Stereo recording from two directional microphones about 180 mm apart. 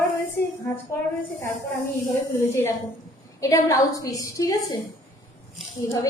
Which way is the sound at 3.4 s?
20° left (ahead or behind).